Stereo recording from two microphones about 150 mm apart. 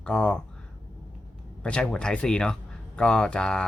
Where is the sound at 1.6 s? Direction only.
5° left (ahead or behind).